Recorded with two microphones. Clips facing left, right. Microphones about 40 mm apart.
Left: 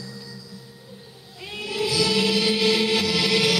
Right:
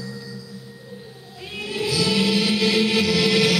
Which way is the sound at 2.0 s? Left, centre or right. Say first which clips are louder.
Right 1 dB; centre.